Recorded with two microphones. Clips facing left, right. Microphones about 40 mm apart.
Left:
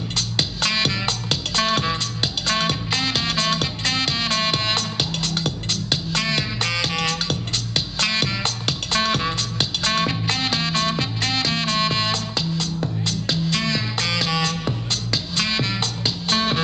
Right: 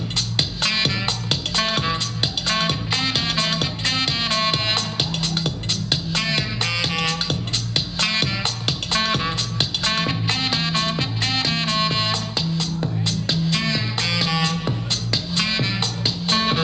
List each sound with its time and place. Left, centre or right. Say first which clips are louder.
0.4 s music: even; centre
3.3 s music: left 1 dB; right
10.5 s music: even; centre
15.4 s music: even; centre